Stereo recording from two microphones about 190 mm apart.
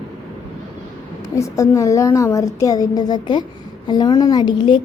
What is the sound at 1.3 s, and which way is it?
A woman's voice, 15° left (ahead or behind).